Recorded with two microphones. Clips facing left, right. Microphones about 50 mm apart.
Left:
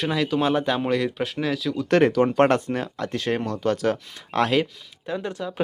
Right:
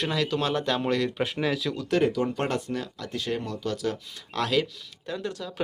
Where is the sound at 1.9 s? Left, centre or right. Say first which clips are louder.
Left 6 dB; left.